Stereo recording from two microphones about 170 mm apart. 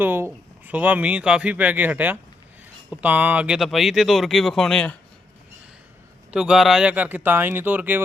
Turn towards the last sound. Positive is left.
turn(degrees=-10)  # may be behind; listen again after turning